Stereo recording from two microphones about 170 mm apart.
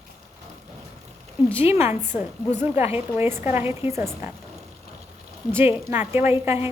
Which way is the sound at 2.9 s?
15° right (ahead or behind).